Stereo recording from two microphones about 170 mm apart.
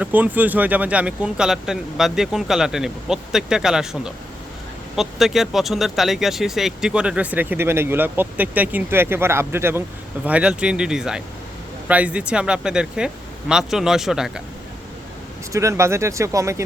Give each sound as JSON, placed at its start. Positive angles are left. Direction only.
{"t": 0.0, "sound": "speech", "side_deg": -10}
{"t": 15.5, "sound": "speech", "side_deg": -15}